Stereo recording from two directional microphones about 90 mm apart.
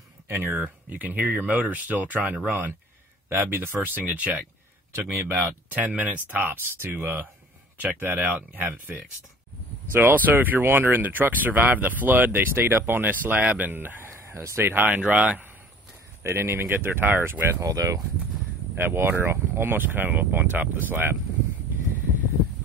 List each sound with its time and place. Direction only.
0.3 s speech: 25° right (ahead or behind)
5.0 s speech: 30° right (ahead or behind)
5.7 s speech: 20° right (ahead or behind)
16.2 s speech: 30° right (ahead or behind)
17.7 s speech: 40° right (ahead or behind)
18.8 s speech: 25° right (ahead or behind)